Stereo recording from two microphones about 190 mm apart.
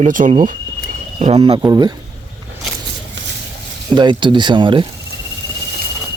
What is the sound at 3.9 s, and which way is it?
Speech, 25° right (ahead or behind).